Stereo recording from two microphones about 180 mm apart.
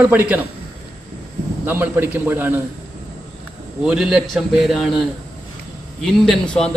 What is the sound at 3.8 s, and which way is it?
A man's voice, 5° right (ahead or behind).